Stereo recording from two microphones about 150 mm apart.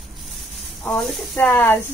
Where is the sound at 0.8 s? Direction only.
5° left (ahead or behind).